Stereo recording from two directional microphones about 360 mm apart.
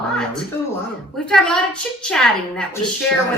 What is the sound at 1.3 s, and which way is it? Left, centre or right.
Speech, centre.